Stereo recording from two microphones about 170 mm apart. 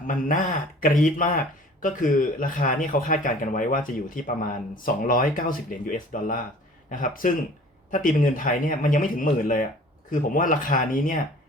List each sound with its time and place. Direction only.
0.1 s speech: 50° left (ahead or behind)